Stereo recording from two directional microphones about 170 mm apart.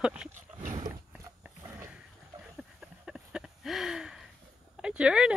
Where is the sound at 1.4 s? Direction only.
10° right (ahead or behind).